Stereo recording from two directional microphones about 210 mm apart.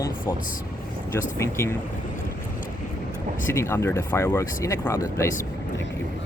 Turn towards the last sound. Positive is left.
turn(degrees=15)  # may be behind; listen again after turning